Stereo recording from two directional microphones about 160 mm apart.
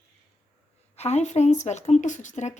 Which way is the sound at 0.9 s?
40° left (ahead or behind).